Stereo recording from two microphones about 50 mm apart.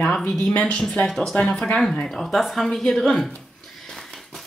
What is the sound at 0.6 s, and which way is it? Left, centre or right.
Speech, centre.